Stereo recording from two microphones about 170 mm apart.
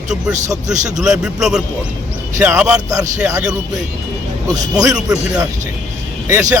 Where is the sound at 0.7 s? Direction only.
45° right (ahead or behind).